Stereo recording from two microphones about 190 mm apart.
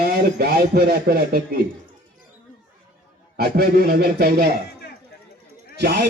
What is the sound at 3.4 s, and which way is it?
A man's voice, 55° right (ahead or behind).